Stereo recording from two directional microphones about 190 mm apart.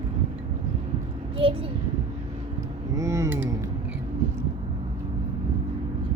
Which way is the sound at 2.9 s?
15° right (ahead or behind).